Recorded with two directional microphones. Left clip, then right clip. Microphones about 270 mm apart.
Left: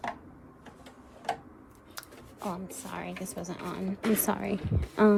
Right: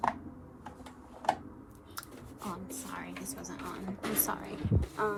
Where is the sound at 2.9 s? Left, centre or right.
Left.